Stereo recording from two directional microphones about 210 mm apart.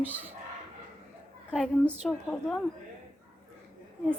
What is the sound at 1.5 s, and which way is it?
Speech, 5° right (ahead or behind).